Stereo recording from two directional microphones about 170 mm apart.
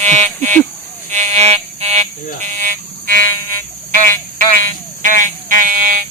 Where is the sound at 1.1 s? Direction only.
40° right (ahead or behind).